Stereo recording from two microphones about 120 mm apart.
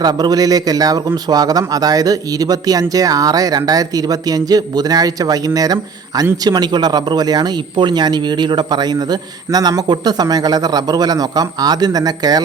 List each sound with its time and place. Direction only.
0.0 s speech: 35° right (ahead or behind)